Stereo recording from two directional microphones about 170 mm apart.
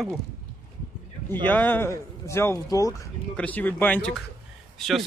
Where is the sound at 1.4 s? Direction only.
10° left (ahead or behind).